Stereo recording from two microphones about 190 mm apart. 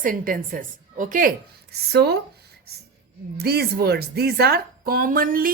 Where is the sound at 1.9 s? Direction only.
60° right (ahead or behind).